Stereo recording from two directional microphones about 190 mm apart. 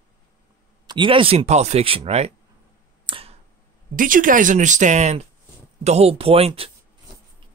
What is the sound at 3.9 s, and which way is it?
Speech, 45° right (ahead or behind).